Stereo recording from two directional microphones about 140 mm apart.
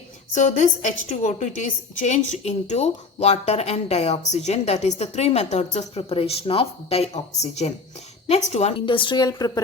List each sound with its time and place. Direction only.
0.3 s a woman's voice: 60° left (ahead or behind)
8.9 s a woman's voice: 35° left (ahead or behind)